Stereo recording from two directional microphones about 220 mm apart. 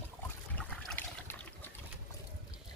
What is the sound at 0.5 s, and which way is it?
Trickle, 5° left (ahead or behind).